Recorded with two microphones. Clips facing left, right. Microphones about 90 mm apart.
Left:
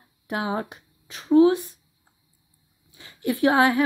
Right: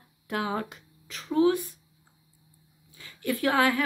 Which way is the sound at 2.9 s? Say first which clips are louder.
Left 4 dB; 25° left (ahead or behind).